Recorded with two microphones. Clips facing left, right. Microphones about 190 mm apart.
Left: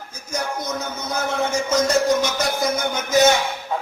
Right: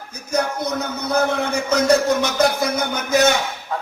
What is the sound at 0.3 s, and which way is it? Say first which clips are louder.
A man's voice: right 5 dB; 60° right (ahead or behind).